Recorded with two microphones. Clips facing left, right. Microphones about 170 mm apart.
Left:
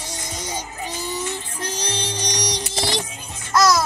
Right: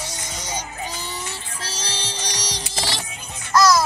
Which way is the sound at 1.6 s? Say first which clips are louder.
Left 5 dB; 15° left (ahead or behind).